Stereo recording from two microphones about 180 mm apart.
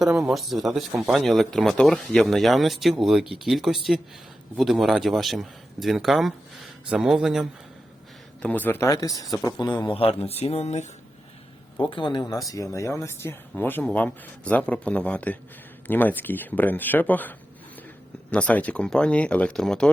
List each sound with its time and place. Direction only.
0.0 s a man's voice: centre (ahead or behind); by 10.8 s 35° left (ahead or behind)
11.9 s a man's voice: 25° left (ahead or behind); by 19.9 s 5° left (ahead or behind)